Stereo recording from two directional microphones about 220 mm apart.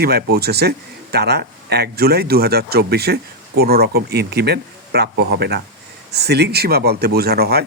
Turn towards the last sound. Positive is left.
turn(degrees=-45)  # may be behind; listen again after turning